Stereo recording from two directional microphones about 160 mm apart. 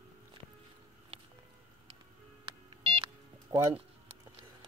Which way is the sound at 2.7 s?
35° right (ahead or behind).